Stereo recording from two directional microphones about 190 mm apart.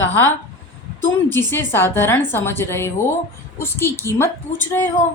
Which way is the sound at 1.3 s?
10° left (ahead or behind).